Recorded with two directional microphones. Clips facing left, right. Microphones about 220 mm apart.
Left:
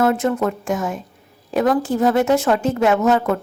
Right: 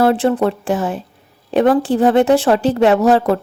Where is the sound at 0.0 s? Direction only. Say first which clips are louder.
Right 4 dB; 30° right (ahead or behind).